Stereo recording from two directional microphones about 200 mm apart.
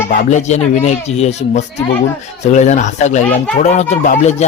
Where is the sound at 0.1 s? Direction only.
35° left (ahead or behind).